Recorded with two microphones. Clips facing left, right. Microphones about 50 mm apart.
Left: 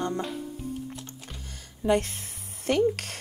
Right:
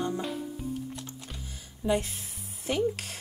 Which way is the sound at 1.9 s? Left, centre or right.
Left.